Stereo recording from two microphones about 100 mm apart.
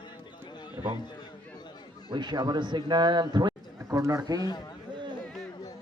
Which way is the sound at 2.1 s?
50° right (ahead or behind).